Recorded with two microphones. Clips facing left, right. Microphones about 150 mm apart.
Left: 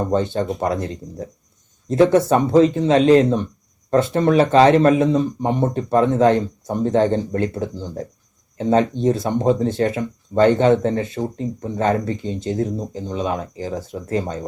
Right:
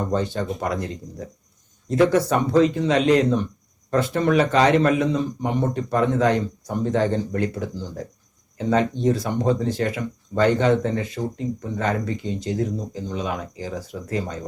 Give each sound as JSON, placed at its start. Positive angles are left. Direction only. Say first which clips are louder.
{"t": 0.0, "sound": "speech", "louder": "left 4 dB", "side_deg": 30}
{"t": 1.9, "sound": "speech", "louder": "left 4 dB", "side_deg": 25}